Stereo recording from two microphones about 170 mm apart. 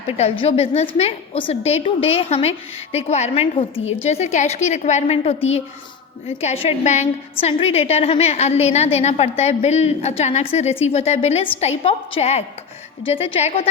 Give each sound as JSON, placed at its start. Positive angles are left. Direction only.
{"t": 0.2, "sound": "a woman's voice", "side_deg": 35}